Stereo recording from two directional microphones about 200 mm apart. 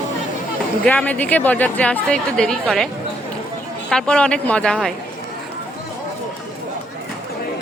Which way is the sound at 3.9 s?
5° left (ahead or behind).